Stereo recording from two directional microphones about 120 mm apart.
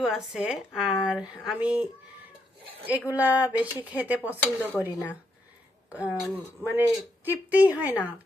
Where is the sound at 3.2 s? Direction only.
15° right (ahead or behind).